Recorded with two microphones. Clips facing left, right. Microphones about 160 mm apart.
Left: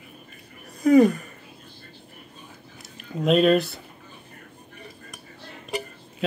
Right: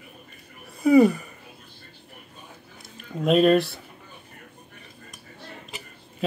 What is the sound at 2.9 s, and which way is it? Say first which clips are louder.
Speech: even; centre (ahead or behind).